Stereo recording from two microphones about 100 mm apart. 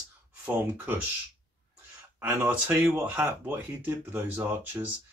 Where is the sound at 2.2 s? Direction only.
15° right (ahead or behind).